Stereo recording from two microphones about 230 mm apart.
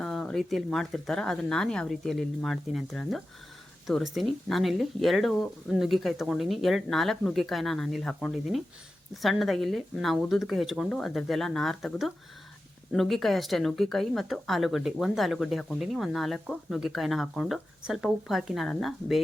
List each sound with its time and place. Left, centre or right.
0.0 s speech: centre